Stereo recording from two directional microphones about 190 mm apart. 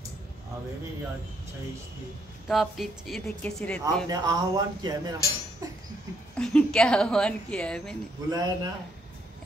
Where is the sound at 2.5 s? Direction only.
Centre (ahead or behind).